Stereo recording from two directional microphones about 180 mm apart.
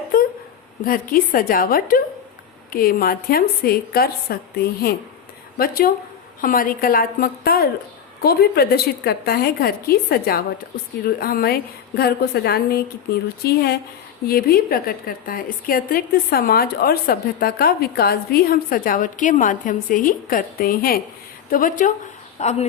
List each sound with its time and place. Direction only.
0.9 s a woman's voice: 50° left (ahead or behind)
22.4 s speech: 40° left (ahead or behind)